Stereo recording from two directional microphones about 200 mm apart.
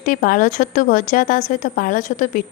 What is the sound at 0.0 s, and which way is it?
A woman's voice, 45° left (ahead or behind).